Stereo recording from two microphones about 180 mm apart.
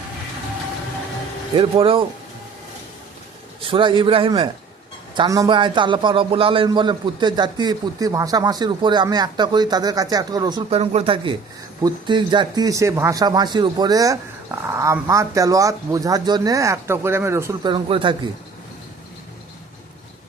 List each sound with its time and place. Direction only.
1.5 s speech: 30° right (ahead or behind)
3.6 s speech: 30° right (ahead or behind)
10.7 s speech: 35° right (ahead or behind)